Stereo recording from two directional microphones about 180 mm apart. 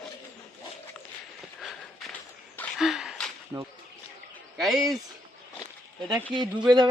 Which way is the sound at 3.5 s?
15° right (ahead or behind).